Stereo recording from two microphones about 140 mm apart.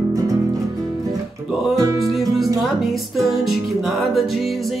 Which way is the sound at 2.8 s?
Centre (ahead or behind).